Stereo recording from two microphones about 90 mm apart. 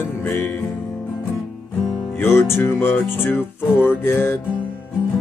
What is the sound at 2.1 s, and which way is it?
Music, 30° left (ahead or behind).